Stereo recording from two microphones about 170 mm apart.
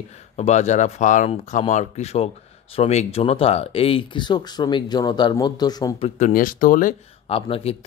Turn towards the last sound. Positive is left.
turn(degrees=35)  # may be behind; listen again after turning